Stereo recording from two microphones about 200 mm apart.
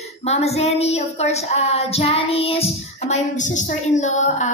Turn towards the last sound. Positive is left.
turn(degrees=35)  # may be behind; listen again after turning